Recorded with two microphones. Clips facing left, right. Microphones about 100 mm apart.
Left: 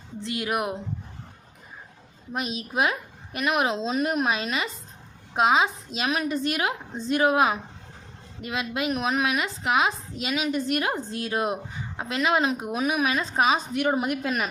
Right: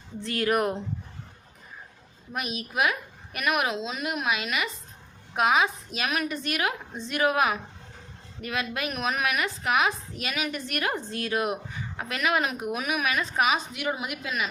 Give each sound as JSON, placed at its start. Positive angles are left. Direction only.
{"t": 0.2, "sound": "speech", "side_deg": 15}
{"t": 2.3, "sound": "a woman's voice", "side_deg": 25}
{"t": 13.7, "sound": "a woman's voice", "side_deg": 40}